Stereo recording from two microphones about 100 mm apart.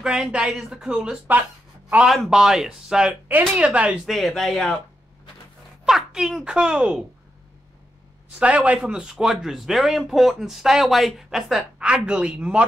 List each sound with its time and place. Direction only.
0.0 s speech: 10° right (ahead or behind)
4.1 s speech: centre (ahead or behind)
5.9 s speech: 5° right (ahead or behind)
8.4 s speech: 10° right (ahead or behind)